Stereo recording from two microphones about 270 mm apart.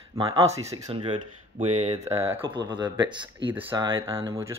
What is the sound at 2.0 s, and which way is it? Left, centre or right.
Speech, centre.